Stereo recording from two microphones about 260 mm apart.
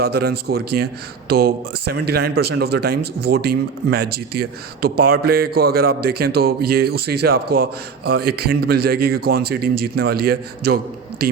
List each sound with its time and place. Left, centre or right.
0.0 s speech: right